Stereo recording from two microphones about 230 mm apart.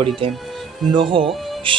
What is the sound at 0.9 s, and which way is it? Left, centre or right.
Speech, right.